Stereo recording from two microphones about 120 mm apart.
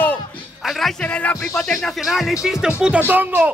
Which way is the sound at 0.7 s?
Centre (ahead or behind).